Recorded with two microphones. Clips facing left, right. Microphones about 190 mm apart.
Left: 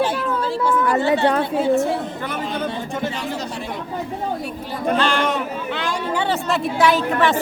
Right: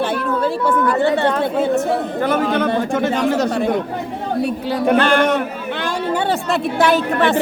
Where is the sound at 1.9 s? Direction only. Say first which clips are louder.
Right 6 dB; 55° right (ahead or behind).